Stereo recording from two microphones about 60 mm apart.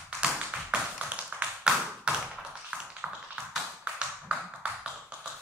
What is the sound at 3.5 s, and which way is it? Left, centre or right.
Tap, centre.